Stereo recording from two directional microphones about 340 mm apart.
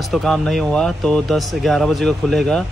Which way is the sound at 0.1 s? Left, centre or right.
Centre.